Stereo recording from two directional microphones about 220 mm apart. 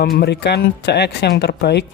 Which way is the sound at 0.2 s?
50° left (ahead or behind).